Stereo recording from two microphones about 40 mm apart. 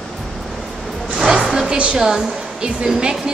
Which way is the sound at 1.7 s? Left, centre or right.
Right.